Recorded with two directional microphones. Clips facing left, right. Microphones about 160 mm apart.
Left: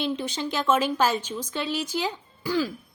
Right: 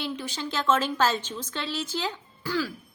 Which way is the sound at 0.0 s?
20° left (ahead or behind).